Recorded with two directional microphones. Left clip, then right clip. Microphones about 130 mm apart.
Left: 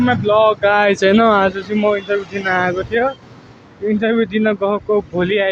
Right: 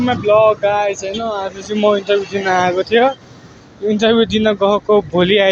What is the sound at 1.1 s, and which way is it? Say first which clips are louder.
Speech: left 9 dB; 80° left.